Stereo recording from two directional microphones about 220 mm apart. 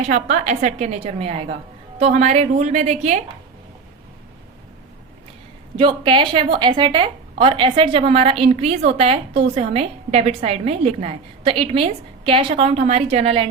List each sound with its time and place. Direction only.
0.1 s a woman's voice: 35° right (ahead or behind)
5.7 s a woman's voice: 25° right (ahead or behind)